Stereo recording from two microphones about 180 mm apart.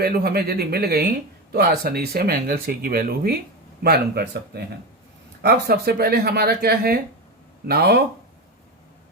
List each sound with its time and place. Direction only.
0.0 s speech: 55° right (ahead or behind)